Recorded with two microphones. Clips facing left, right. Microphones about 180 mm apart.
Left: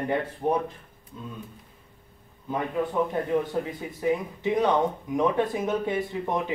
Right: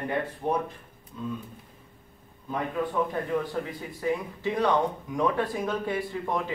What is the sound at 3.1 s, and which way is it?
Speech, 20° left (ahead or behind).